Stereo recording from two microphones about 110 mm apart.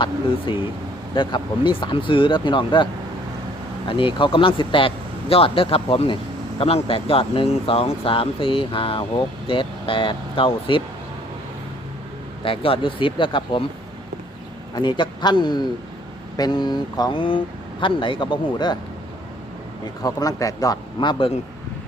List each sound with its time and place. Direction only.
0.0 s speech: 50° left (ahead or behind)
12.5 s speech: 55° left (ahead or behind)
14.8 s speech: 45° left (ahead or behind)
20.0 s speech: 35° left (ahead or behind); by 21.3 s 50° left (ahead or behind)